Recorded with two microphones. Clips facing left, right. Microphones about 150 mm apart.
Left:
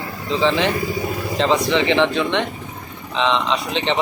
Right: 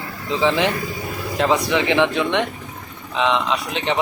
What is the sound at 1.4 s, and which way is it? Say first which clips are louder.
Speech: left 1 dB; 10° right (ahead or behind).